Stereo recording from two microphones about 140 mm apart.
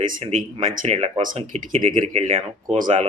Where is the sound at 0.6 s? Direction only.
50° right (ahead or behind).